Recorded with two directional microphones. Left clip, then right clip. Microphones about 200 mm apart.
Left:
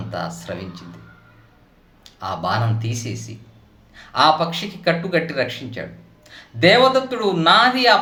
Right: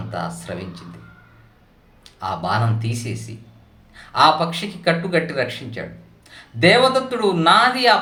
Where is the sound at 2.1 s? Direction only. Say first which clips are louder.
Even; 5° left (ahead or behind).